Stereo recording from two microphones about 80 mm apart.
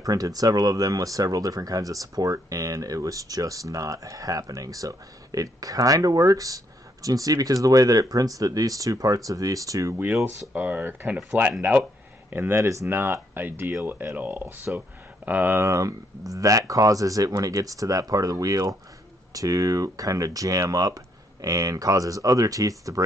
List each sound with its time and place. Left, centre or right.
0.0 s speech: right
10.5 s speech: right
12.3 s speech: right
15.6 s speech: right